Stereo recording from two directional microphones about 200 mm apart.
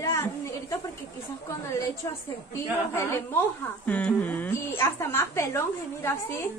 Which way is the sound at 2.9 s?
10° left (ahead or behind).